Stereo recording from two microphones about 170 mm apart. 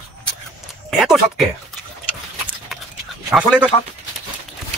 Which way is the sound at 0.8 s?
Centre (ahead or behind).